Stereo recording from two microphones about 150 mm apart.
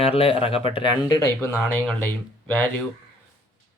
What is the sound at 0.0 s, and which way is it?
Speech, 40° left (ahead or behind).